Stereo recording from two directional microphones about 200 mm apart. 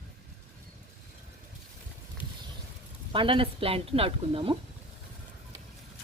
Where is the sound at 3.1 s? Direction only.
25° right (ahead or behind).